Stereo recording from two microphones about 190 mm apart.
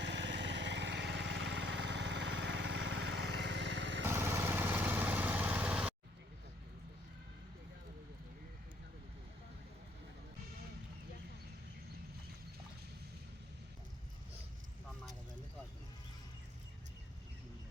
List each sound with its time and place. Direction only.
0.0 s vehicle: 70° right (ahead or behind)
4.1 s vehicle: 15° right (ahead or behind)